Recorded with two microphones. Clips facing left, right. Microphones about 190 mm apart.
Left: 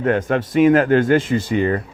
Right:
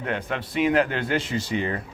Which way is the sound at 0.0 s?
45° left (ahead or behind).